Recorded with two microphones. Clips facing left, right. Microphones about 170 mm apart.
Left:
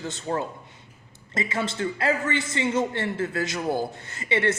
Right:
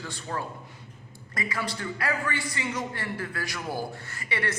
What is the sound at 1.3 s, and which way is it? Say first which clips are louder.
A man's voice: left 5 dB; 25° left (ahead or behind).